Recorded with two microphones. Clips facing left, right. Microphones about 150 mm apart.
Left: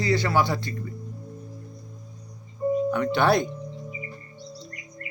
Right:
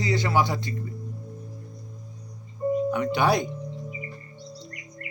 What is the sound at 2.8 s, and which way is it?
Speech, 15° right (ahead or behind).